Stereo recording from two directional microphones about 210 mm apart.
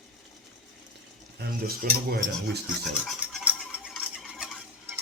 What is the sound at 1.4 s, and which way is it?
Speech, 50° right (ahead or behind).